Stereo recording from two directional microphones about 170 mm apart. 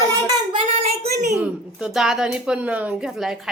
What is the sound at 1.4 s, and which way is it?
A woman's voice, 5° right (ahead or behind).